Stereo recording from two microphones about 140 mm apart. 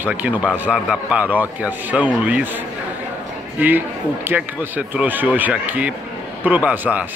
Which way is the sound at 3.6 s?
15° right (ahead or behind).